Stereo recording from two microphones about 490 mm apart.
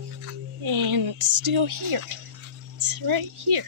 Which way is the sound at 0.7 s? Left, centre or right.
Right.